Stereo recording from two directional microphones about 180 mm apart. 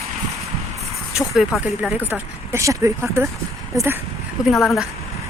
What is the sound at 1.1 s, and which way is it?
Speech, centre (ahead or behind).